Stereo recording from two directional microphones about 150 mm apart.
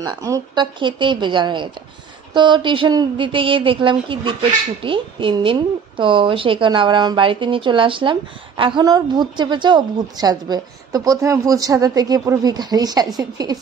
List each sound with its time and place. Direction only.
0.0 s a woman's voice: 25° right (ahead or behind)